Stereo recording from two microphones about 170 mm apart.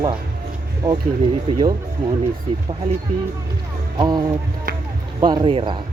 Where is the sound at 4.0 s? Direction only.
25° right (ahead or behind).